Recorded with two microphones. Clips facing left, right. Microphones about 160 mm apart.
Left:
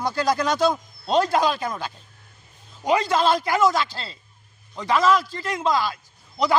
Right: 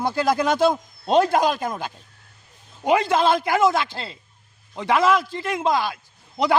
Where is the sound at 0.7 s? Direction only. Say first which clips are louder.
Right 3 dB; 15° right (ahead or behind).